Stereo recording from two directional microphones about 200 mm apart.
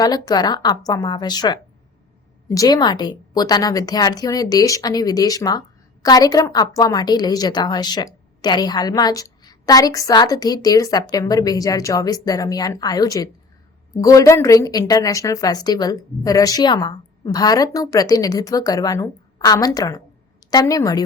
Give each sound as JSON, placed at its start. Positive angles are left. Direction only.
{"t": 0.0, "sound": "a woman's voice", "side_deg": 20}